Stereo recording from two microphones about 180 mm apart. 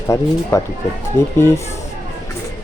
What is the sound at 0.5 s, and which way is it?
Speech, 15° left (ahead or behind).